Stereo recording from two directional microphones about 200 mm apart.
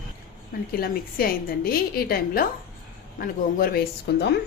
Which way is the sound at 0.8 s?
50° left (ahead or behind).